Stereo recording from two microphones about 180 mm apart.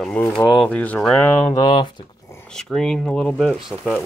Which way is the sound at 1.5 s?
25° left (ahead or behind).